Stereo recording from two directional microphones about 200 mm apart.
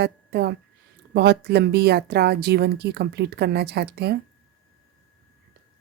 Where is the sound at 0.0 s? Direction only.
55° right (ahead or behind).